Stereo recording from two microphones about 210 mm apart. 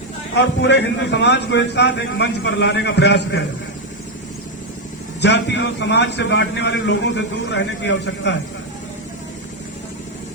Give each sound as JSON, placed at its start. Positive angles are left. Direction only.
{"t": 0.3, "sound": "a man's voice", "side_deg": 55}
{"t": 5.2, "sound": "a man's voice", "side_deg": 55}